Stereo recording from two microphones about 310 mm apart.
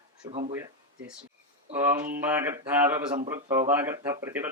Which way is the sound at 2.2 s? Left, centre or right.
Centre.